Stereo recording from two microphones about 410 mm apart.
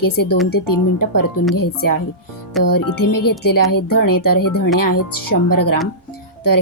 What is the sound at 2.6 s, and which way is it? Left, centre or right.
A woman's voice, left.